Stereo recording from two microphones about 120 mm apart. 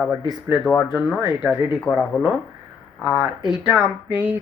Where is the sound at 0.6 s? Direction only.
Centre (ahead or behind).